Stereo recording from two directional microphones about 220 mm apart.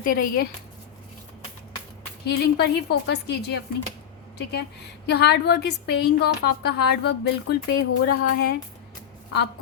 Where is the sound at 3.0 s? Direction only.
50° left (ahead or behind).